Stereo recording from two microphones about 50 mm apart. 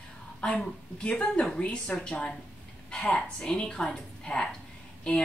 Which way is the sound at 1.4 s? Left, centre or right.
Centre.